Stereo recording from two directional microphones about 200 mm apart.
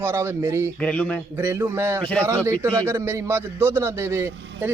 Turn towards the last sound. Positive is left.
turn(degrees=-15)  # may be behind; listen again after turning